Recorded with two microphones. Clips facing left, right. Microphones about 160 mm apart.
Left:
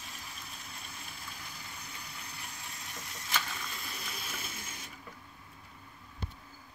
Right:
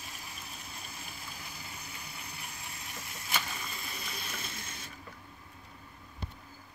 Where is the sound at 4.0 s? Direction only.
5° left (ahead or behind).